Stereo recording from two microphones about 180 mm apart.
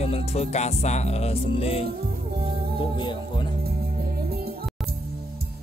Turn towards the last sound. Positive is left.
turn(degrees=-60)  # may be behind; listen again after turning